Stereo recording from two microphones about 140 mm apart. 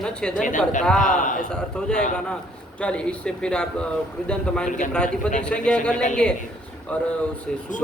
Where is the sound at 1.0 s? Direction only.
65° left (ahead or behind).